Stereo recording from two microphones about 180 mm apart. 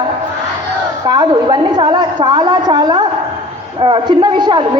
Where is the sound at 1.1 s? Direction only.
25° right (ahead or behind).